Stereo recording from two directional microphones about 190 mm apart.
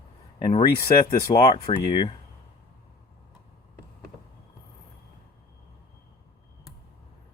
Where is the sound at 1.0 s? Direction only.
20° left (ahead or behind).